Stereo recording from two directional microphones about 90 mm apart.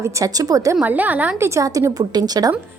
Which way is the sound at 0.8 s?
20° right (ahead or behind).